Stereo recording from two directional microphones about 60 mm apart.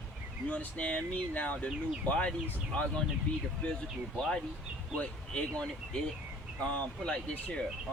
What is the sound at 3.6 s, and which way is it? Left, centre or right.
Speech, left.